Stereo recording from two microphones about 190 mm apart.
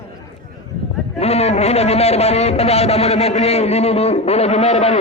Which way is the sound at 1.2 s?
35° left (ahead or behind).